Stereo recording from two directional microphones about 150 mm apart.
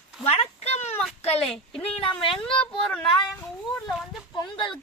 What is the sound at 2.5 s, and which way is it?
Speech, 35° left (ahead or behind).